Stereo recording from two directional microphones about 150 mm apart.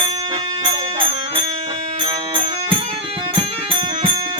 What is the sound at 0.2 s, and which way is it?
Music, 30° right (ahead or behind).